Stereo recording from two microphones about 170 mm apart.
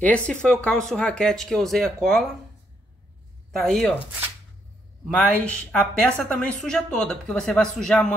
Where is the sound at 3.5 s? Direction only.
Centre (ahead or behind).